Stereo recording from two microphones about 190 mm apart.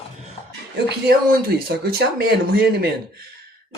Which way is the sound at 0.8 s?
55° right (ahead or behind).